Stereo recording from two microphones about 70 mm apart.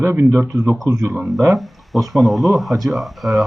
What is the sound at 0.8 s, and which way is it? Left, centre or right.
Speech, right.